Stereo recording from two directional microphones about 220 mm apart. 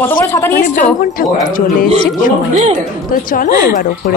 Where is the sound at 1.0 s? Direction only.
40° left (ahead or behind).